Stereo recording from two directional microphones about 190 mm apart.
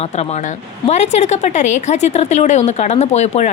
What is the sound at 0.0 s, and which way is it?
Speech, 35° left (ahead or behind).